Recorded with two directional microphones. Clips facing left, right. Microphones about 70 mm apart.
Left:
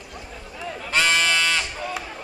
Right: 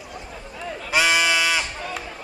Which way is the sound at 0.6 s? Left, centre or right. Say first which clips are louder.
Right 1 dB; centre.